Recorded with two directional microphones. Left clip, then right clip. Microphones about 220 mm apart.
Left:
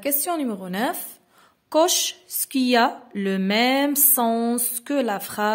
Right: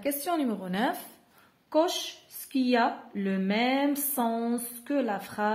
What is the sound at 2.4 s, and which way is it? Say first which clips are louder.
A woman's voice: left 6 dB; 45° left (ahead or behind).